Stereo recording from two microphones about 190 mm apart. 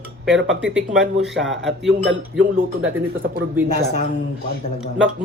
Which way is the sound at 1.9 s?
65° right (ahead or behind).